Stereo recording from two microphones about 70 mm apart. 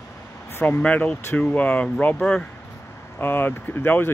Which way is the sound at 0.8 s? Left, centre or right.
Left.